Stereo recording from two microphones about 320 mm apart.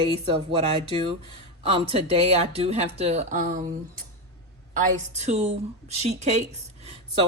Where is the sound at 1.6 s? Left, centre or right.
Centre.